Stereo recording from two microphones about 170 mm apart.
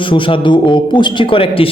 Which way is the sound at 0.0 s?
30° left (ahead or behind).